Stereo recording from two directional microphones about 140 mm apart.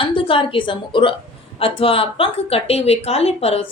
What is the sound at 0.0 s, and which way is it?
A woman's voice, 40° left (ahead or behind).